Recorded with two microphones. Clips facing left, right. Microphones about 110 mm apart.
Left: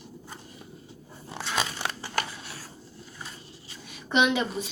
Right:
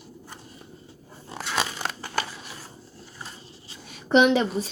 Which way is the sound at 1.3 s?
5° right (ahead or behind).